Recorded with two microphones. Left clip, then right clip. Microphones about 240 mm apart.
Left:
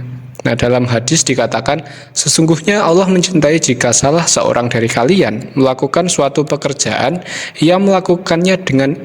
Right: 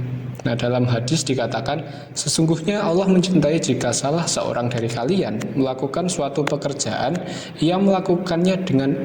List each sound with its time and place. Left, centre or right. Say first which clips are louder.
0.4 s a man's voice: left 9 dB; left